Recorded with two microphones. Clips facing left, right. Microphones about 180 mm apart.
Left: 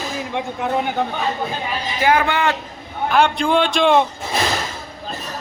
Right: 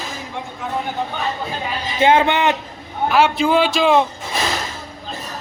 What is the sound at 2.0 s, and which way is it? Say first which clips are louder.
Speech: right 3 dB; 25° right (ahead or behind).